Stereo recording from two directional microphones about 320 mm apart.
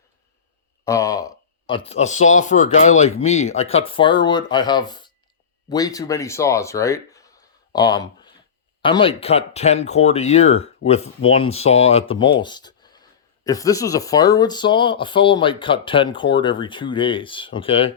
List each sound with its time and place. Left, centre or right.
0.9 s speech: centre